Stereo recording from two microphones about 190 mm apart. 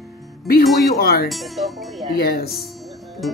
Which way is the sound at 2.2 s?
55° left (ahead or behind).